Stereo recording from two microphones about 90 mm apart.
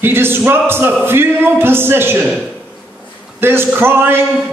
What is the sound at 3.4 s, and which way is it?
Speech, 25° right (ahead or behind).